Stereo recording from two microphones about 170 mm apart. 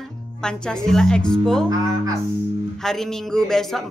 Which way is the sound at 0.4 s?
5° left (ahead or behind).